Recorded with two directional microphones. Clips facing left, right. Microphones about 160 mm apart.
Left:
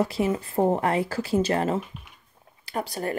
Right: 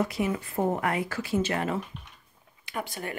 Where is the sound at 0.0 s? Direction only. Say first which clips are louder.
Left 4 dB; 30° left (ahead or behind).